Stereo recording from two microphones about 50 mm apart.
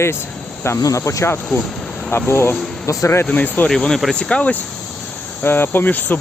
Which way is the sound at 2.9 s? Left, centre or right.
Left.